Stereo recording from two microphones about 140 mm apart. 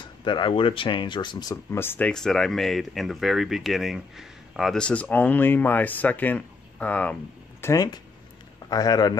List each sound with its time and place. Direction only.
0.0 s speech: 35° left (ahead or behind); by 7.2 s 10° left (ahead or behind)
7.6 s a man's voice: 25° left (ahead or behind)